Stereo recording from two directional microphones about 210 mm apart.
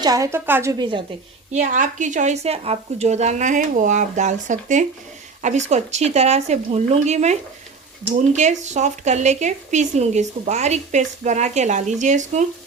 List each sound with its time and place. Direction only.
0.0 s a woman's voice: 15° right (ahead or behind)
1.5 s speech: 35° right (ahead or behind)